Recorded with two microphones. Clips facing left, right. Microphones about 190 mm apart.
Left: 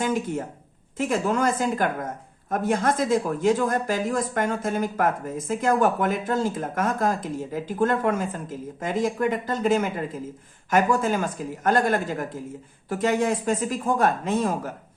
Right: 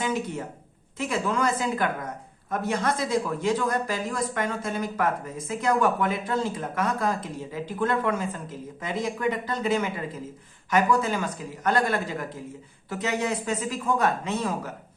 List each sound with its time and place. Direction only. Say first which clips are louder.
0.0 s speech: left 3 dB; 45° left (ahead or behind)